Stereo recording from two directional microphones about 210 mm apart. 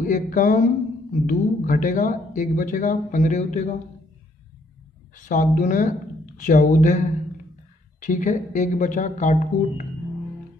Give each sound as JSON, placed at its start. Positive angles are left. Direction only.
{"t": 0.0, "sound": "speech", "side_deg": 40}
{"t": 5.1, "sound": "speech", "side_deg": 35}